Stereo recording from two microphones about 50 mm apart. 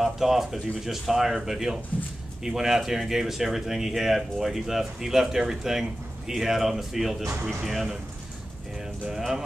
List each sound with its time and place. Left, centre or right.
0.0 s speech: centre